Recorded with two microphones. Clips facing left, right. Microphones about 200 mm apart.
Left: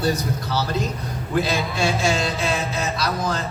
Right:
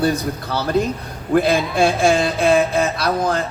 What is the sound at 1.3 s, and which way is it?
Speech, 55° right (ahead or behind).